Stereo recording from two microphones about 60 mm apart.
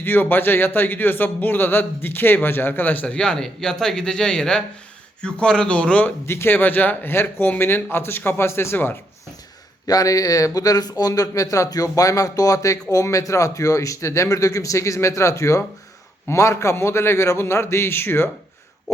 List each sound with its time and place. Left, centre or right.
0.0 s a man's voice: left
3.1 s speech: centre
6.2 s a man's voice: left
7.1 s a man's voice: left
9.8 s a man's voice: left